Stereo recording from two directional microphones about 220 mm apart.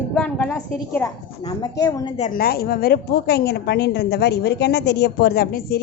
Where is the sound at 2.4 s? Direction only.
45° left (ahead or behind).